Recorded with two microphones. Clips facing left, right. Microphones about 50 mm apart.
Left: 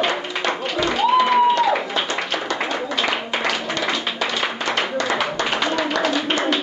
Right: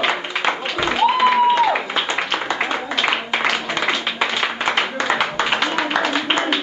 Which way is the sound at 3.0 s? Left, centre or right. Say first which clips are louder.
Right 4 dB; right.